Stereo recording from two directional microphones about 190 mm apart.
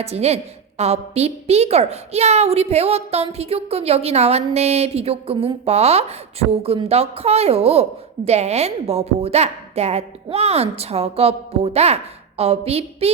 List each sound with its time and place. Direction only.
0.0 s a woman's voice: 35° right (ahead or behind)